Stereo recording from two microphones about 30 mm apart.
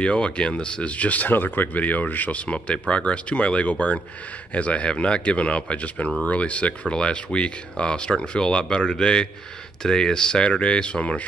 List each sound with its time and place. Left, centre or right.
0.0 s speech: left
0.9 s speech: left
1.2 s speech: left
2.3 s speech: left
6.9 s speech: left